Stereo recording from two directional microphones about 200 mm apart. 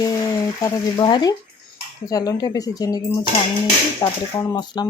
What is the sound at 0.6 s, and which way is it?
Speech, 20° left (ahead or behind).